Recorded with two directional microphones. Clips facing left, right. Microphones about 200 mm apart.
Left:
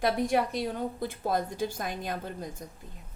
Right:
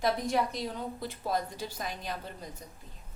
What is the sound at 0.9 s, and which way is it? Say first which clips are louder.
A woman's voice: left 3 dB; 50° left (ahead or behind).